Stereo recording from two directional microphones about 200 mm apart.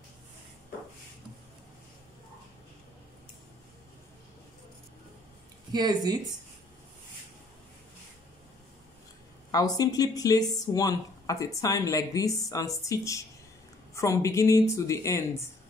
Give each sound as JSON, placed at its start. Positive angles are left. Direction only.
{"t": 5.7, "sound": "speech", "side_deg": -20}
{"t": 9.5, "sound": "a woman's voice", "side_deg": 20}